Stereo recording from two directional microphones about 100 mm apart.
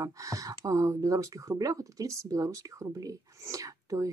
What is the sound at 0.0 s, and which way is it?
Speech, 35° right (ahead or behind).